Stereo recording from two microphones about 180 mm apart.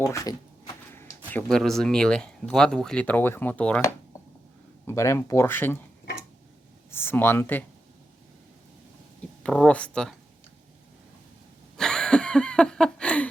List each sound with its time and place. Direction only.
0.0 s speech: 20° left (ahead or behind)
1.3 s speech: 5° left (ahead or behind)
4.9 s speech: 15° left (ahead or behind)
6.9 s speech: 10° left (ahead or behind)
9.4 s speech: 5° left (ahead or behind)
11.8 s a sound: 5° left (ahead or behind)